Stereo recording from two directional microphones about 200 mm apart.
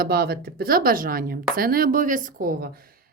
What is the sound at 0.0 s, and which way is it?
A woman's voice, 50° right (ahead or behind).